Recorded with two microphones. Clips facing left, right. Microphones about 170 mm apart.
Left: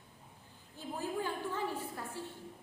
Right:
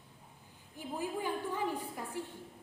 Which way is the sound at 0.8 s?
15° right (ahead or behind).